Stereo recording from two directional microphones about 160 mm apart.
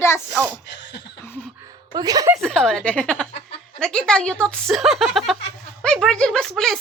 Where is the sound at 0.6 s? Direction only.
90° left.